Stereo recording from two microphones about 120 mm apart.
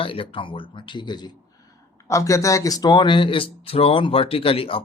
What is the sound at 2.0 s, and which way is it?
Speech, 25° left (ahead or behind).